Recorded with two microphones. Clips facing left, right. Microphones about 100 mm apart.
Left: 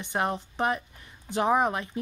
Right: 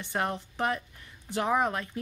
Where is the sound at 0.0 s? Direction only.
20° left (ahead or behind).